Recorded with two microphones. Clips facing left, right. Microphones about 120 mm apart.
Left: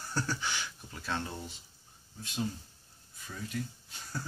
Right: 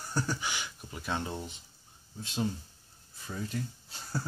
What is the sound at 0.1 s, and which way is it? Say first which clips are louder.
Speech: right 1 dB; 15° right (ahead or behind).